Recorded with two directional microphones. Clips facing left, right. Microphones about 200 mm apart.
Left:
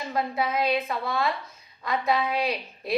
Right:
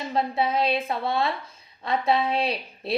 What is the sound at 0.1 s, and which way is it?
A woman's voice, 30° right (ahead or behind).